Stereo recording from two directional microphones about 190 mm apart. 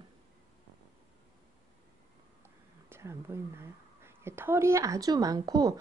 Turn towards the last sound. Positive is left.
turn(degrees=-20)  # may be behind; listen again after turning